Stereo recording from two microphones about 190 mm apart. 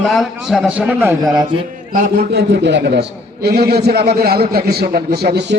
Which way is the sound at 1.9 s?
45° right (ahead or behind).